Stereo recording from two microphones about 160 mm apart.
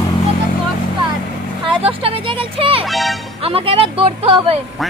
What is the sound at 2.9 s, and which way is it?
Music, centre (ahead or behind).